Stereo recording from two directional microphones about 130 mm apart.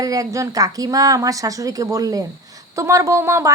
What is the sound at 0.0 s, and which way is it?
A woman's voice, 25° right (ahead or behind).